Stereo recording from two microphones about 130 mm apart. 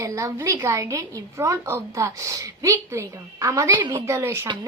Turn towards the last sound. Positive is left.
turn(degrees=-20)  # may be behind; listen again after turning